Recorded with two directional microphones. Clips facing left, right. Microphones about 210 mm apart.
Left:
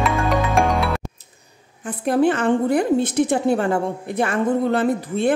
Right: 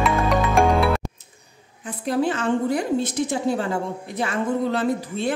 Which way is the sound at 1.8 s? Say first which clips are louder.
Left 5 dB; 55° left (ahead or behind).